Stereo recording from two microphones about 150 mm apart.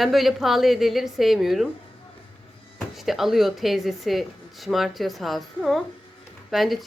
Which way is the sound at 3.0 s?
Centre (ahead or behind).